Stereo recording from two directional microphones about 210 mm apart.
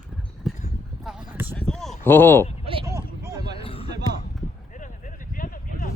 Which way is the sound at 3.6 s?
25° left (ahead or behind).